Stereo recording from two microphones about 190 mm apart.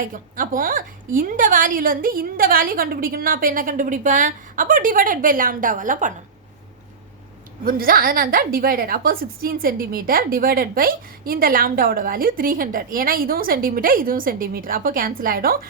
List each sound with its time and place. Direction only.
0.0 s a woman's voice: 45° right (ahead or behind)
7.6 s a woman's voice: 50° right (ahead or behind)